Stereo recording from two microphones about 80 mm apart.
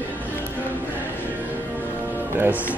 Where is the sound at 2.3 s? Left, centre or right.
Right.